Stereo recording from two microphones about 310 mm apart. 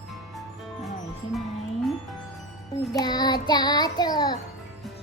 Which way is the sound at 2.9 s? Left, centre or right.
Centre.